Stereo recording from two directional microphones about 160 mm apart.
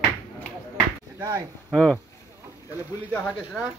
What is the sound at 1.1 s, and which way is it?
Speech, 20° right (ahead or behind).